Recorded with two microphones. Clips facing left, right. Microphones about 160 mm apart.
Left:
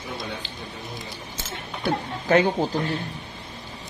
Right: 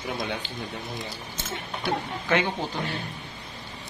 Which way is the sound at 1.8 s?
40° left (ahead or behind).